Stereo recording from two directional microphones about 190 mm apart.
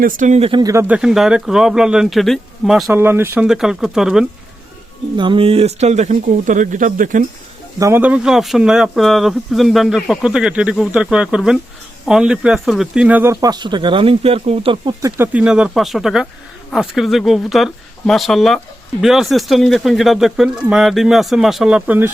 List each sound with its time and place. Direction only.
0.0 s speech: 45° right (ahead or behind)
0.6 s speech: 15° right (ahead or behind)
2.9 s speech: 10° right (ahead or behind)
5.1 s speech: 25° right (ahead or behind); by 7.3 s 45° right (ahead or behind)
7.8 s speech: 15° right (ahead or behind)
15.2 s speech: 5° right (ahead or behind)